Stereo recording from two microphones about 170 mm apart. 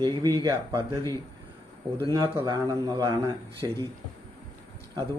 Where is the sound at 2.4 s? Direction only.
25° right (ahead or behind).